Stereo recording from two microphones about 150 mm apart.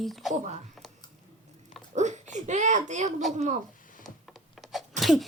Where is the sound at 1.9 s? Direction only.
50° right (ahead or behind).